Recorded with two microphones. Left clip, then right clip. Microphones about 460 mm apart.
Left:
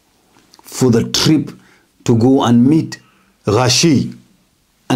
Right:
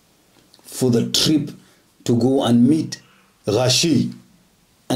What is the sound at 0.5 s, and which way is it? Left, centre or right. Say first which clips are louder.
Speech: left 5 dB; left.